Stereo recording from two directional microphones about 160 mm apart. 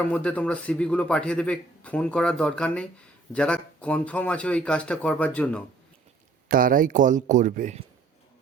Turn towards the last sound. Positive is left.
turn(degrees=-50)  # may be behind; listen again after turning